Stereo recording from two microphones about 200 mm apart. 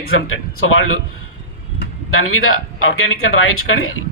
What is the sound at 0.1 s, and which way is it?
Speech, 90° left.